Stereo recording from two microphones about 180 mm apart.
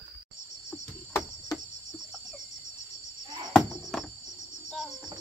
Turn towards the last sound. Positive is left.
turn(degrees=0)  # may be behind; listen again after turning